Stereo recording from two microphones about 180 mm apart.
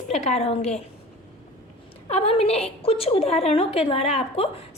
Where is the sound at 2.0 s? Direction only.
35° left (ahead or behind).